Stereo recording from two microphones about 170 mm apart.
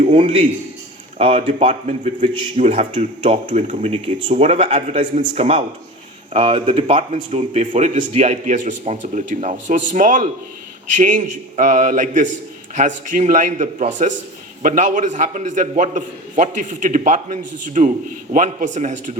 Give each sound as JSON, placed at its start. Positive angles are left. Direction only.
{"t": 1.2, "sound": "a man's voice", "side_deg": -35}
{"t": 7.7, "sound": "a man's voice", "side_deg": -50}